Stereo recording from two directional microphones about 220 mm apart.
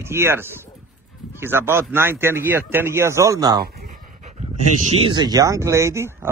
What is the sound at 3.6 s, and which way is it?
Dog, 40° right (ahead or behind).